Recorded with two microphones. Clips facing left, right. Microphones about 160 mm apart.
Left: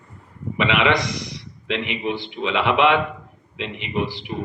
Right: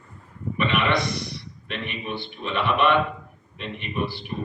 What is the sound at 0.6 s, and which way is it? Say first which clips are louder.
A man's voice: left 4 dB; 90° left.